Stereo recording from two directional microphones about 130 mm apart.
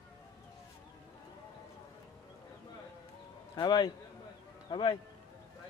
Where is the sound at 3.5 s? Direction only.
30° left (ahead or behind).